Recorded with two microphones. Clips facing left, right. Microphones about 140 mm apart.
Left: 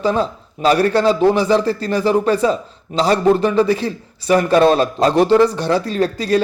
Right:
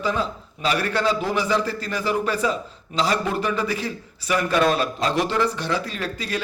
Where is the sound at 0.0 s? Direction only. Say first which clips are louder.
Left 7 dB; 35° left (ahead or behind).